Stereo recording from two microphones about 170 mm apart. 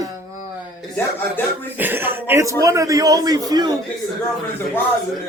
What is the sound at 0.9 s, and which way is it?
Speech, 10° left (ahead or behind).